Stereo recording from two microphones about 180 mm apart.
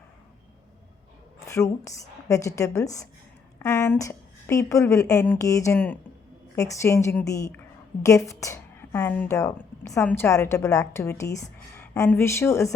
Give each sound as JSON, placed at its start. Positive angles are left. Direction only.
{"t": 1.5, "sound": "a woman's voice", "side_deg": 15}